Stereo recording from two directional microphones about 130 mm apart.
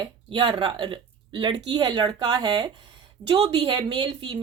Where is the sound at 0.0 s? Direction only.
40° right (ahead or behind).